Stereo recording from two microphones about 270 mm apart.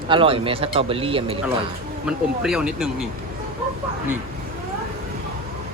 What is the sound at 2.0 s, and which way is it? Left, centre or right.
Speech, centre.